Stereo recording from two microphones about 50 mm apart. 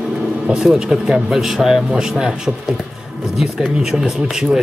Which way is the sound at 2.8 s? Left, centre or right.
Centre.